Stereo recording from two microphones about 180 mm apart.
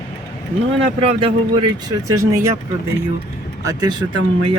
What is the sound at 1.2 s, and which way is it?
Speech, 20° right (ahead or behind).